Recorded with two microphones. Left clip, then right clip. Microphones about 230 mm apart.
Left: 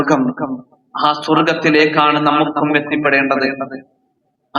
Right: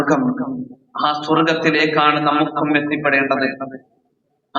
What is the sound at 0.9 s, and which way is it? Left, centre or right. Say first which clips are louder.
A man's voice: left 3 dB; left.